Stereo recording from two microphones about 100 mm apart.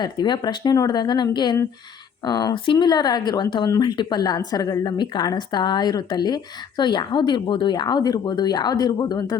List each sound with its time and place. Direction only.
0.0 s a woman's voice: 45° left (ahead or behind)